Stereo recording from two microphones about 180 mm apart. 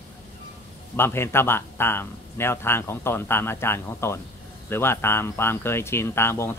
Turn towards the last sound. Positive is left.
turn(degrees=15)  # may be behind; listen again after turning